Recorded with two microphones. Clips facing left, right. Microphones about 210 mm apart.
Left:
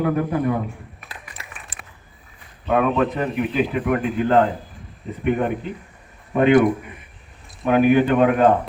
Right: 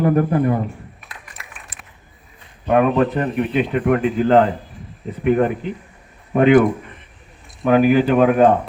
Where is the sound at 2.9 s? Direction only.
Centre (ahead or behind).